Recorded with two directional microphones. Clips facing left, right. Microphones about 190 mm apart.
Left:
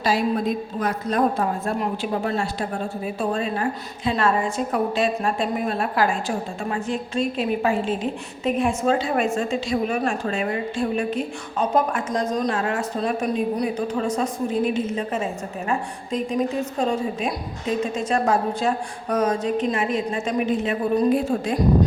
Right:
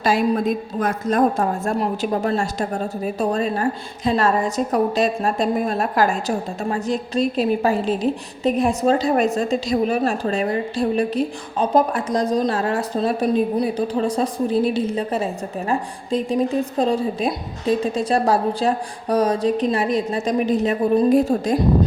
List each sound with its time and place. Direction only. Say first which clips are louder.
0.0 s a woman's voice: right 3 dB; 50° right (ahead or behind)